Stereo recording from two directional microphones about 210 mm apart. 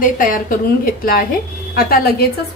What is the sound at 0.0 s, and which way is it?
Speech, 40° left (ahead or behind).